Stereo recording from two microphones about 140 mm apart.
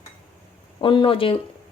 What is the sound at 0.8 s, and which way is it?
Speech, 35° left (ahead or behind).